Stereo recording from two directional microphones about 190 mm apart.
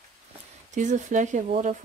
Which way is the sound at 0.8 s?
40° right (ahead or behind).